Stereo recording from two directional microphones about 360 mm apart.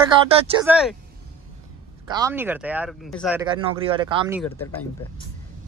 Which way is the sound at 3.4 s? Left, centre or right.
Centre.